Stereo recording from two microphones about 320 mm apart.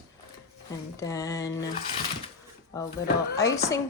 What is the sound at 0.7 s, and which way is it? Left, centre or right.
Speech, centre.